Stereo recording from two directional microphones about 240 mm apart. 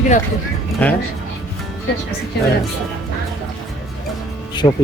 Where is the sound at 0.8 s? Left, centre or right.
Centre.